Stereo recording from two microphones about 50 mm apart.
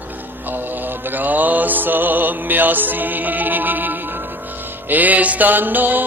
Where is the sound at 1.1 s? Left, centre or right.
Right.